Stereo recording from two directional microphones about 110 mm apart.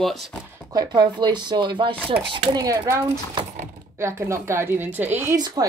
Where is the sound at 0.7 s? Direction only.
40° right (ahead or behind).